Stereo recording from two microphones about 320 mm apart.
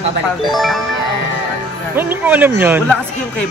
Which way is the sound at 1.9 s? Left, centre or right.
Centre.